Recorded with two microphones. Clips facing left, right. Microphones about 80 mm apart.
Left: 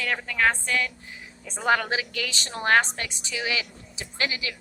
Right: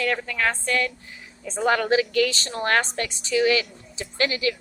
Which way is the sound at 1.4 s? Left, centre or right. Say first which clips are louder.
Right 3 dB; centre.